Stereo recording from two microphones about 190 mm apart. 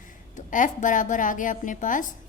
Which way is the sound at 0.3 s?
40° left (ahead or behind).